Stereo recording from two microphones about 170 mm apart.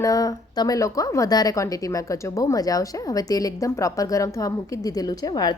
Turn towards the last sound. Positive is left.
turn(degrees=25)  # may be behind; listen again after turning